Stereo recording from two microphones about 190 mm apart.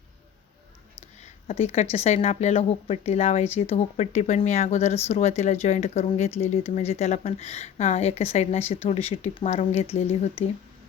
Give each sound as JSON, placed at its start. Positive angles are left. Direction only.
{"t": 1.2, "sound": "speech", "side_deg": 30}